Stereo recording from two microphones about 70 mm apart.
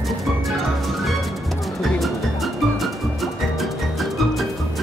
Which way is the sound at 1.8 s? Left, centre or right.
Centre.